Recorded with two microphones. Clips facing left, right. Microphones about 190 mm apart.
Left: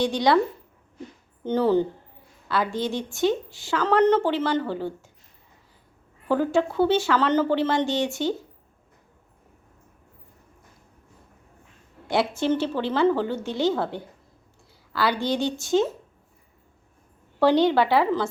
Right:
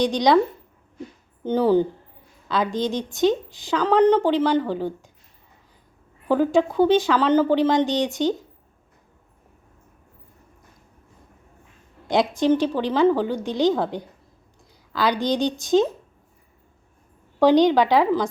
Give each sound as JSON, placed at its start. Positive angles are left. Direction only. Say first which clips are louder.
{"t": 0.0, "sound": "a woman's voice", "louder": "right 3 dB", "side_deg": -15}
{"t": 1.5, "sound": "a woman's voice", "louder": "right 2 dB", "side_deg": -10}
{"t": 6.2, "sound": "a woman's voice", "louder": "right 3 dB", "side_deg": -15}
{"t": 12.0, "sound": "a woman's voice", "louder": "right 4 dB", "side_deg": -15}
{"t": 17.4, "sound": "a woman's voice", "louder": "right 3 dB", "side_deg": -15}